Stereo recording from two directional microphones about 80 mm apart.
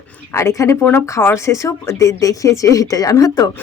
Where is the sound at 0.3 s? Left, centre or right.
Left.